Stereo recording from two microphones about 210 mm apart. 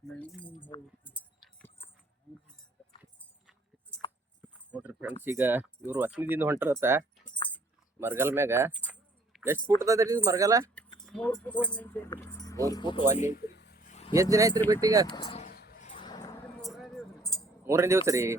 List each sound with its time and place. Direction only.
0.2 s keys jangling: 5° left (ahead or behind)
4.7 s speech: 10° right (ahead or behind)
8.9 s a sound: 10° right (ahead or behind)
9.6 s speech: 15° right (ahead or behind)
11.0 s speech: 5° left (ahead or behind); by 13.1 s 20° left (ahead or behind)
13.1 s speech: 35° left (ahead or behind)
13.4 s a sound: 55° left (ahead or behind)
13.8 s vehicle: 30° left (ahead or behind)
14.1 s speech: 15° right (ahead or behind)
15.1 s speech: 20° left (ahead or behind)
15.4 s a sound: 45° left (ahead or behind)
16.0 s a sound: 20° left (ahead or behind)
16.6 s music: centre (ahead or behind)
17.7 s speech: 15° right (ahead or behind)